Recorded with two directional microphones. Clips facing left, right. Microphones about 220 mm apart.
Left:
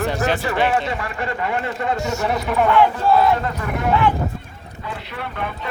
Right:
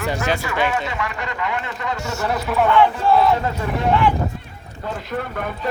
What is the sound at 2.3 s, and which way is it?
Speech, centre (ahead or behind).